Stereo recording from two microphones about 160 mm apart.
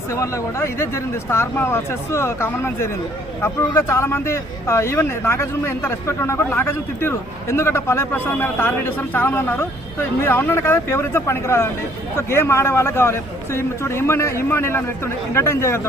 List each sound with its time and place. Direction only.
0.1 s speech: 20° left (ahead or behind)